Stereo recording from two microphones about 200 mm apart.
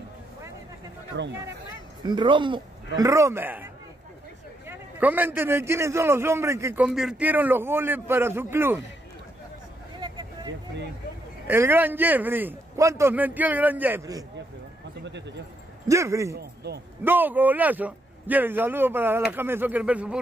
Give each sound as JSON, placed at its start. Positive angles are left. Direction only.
{"t": 1.1, "sound": "a man's voice", "side_deg": -60}
{"t": 2.0, "sound": "a man's voice", "side_deg": -25}
{"t": 4.6, "sound": "a man's voice", "side_deg": -10}
{"t": 9.9, "sound": "a sound", "side_deg": -20}
{"t": 11.4, "sound": "a man's voice", "side_deg": -10}
{"t": 15.0, "sound": "a man's voice", "side_deg": -60}
{"t": 15.9, "sound": "a man's voice", "side_deg": -15}
{"t": 16.3, "sound": "a man's voice", "side_deg": -55}
{"t": 17.0, "sound": "a man's voice", "side_deg": -10}